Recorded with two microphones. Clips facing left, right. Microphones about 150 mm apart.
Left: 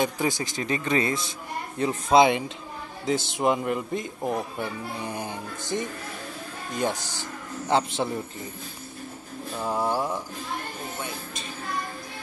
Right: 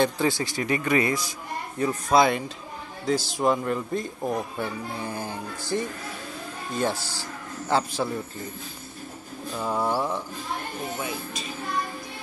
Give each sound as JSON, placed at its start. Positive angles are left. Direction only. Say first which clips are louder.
{"t": 0.0, "sound": "speech", "louder": "right 2 dB", "side_deg": 15}
{"t": 9.6, "sound": "bird", "louder": "even", "side_deg": 10}